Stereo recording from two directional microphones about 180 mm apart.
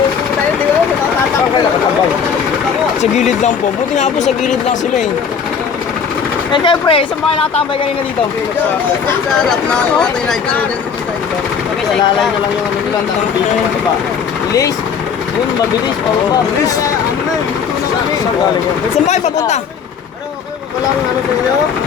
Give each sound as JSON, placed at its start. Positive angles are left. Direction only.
{"t": 3.0, "sound": "speech", "side_deg": 40}
{"t": 6.5, "sound": "speech", "side_deg": 25}
{"t": 9.5, "sound": "speech", "side_deg": 5}
{"t": 19.0, "sound": "speech", "side_deg": 40}